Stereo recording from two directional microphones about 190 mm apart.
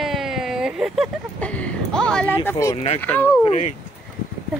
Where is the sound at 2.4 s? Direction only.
15° left (ahead or behind).